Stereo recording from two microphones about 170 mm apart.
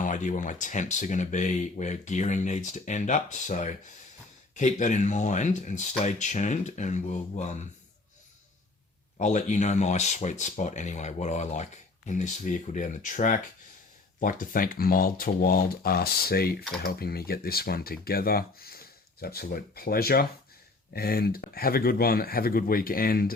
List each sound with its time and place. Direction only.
0.0 s speech: 45° left (ahead or behind)
9.1 s speech: 45° left (ahead or behind); by 23.3 s 60° left (ahead or behind)